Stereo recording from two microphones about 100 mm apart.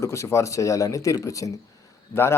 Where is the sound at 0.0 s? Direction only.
30° left (ahead or behind).